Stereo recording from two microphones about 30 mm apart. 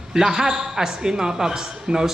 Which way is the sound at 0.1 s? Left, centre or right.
Centre.